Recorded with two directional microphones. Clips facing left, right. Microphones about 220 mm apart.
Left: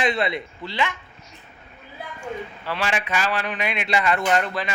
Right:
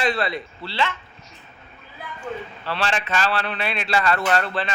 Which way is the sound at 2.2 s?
10° left (ahead or behind).